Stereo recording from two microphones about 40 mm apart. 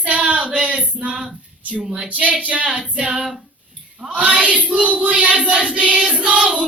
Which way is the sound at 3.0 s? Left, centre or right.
Right.